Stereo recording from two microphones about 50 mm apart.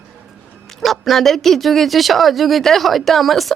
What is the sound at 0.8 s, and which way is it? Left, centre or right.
Speech, centre.